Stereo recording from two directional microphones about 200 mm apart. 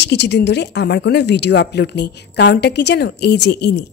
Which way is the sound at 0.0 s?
55° left (ahead or behind).